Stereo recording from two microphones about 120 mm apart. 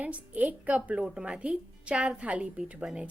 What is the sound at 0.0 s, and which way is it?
Speech, 10° right (ahead or behind).